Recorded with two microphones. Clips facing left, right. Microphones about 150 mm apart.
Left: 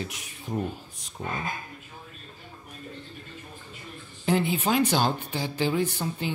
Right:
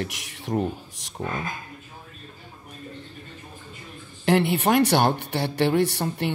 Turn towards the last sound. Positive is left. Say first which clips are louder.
# right 4 dB
turn(degrees=-70)  # may be behind; listen again after turning